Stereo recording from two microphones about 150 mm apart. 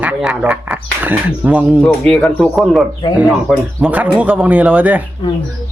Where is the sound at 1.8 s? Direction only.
5° left (ahead or behind).